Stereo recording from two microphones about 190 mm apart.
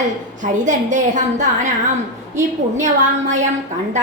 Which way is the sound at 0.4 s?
40° right (ahead or behind).